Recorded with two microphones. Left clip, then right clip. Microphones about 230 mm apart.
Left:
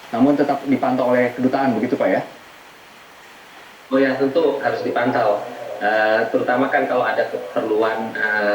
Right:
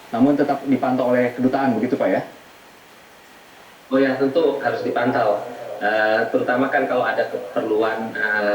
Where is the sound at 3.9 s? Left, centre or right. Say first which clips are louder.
Left 1 dB; centre.